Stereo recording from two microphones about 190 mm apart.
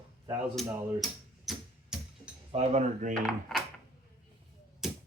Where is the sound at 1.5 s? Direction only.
5° right (ahead or behind).